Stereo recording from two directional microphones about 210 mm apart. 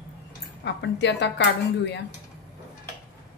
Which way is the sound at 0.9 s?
55° left (ahead or behind).